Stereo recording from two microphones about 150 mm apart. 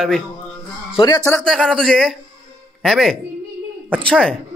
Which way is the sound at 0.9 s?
25° left (ahead or behind).